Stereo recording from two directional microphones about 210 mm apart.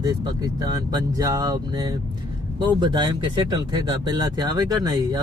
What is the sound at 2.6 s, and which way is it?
Speech, 20° right (ahead or behind).